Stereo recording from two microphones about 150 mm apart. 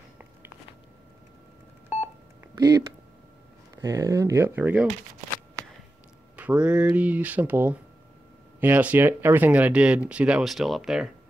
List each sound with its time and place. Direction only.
3.7 s speech: 20° right (ahead or behind)
6.3 s speech: 10° right (ahead or behind)